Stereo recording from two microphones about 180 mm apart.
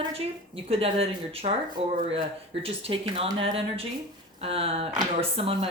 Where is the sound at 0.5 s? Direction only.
35° right (ahead or behind).